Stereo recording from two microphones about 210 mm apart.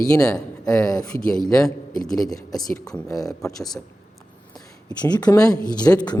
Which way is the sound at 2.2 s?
15° left (ahead or behind).